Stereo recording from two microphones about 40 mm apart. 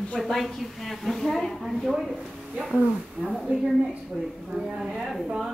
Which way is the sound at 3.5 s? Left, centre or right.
Right.